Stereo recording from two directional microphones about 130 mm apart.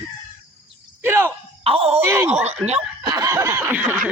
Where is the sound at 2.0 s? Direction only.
20° right (ahead or behind).